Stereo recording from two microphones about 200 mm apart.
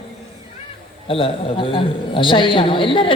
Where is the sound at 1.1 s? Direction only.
25° left (ahead or behind).